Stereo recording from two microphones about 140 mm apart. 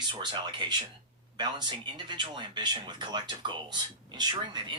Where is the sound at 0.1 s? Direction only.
30° right (ahead or behind).